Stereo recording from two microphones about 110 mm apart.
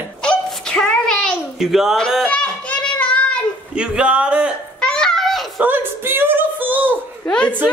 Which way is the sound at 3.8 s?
10° right (ahead or behind).